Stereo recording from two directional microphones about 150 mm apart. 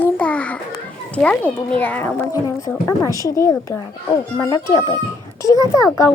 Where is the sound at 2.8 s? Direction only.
20° left (ahead or behind).